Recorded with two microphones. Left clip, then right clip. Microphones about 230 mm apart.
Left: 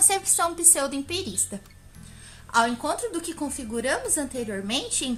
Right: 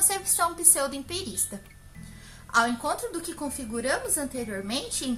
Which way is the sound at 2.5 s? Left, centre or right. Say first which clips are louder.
Left 1 dB; left.